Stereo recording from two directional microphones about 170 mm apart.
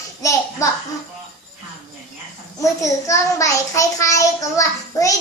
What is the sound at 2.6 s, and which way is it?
A child's voice, 20° left (ahead or behind).